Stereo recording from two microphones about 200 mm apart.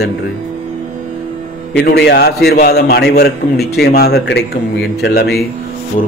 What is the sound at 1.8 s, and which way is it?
A man's voice, 55° left (ahead or behind).